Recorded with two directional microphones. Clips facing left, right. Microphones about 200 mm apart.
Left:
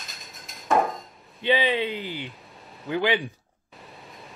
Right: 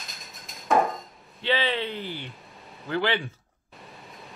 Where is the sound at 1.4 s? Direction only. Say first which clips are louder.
Left 3 dB; 15° left (ahead or behind).